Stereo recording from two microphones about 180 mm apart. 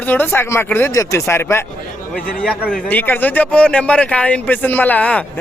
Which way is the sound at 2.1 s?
50° left (ahead or behind).